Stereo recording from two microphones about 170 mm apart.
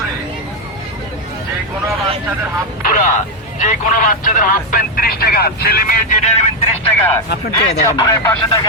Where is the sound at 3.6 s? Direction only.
50° left (ahead or behind).